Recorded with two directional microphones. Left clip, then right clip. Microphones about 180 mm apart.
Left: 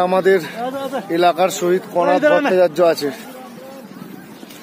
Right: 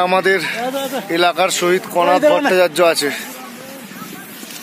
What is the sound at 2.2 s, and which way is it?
Speech, 55° right (ahead or behind).